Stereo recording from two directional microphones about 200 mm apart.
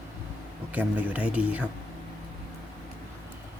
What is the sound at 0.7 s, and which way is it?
Speech, 10° right (ahead or behind).